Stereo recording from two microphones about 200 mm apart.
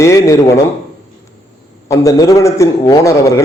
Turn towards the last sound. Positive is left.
turn(degrees=15)  # may be behind; listen again after turning